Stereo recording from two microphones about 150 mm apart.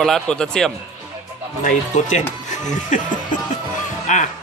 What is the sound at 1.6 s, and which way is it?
Speech, 55° left (ahead or behind).